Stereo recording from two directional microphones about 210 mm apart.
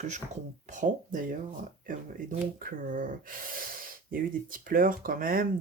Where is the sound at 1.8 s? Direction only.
40° right (ahead or behind).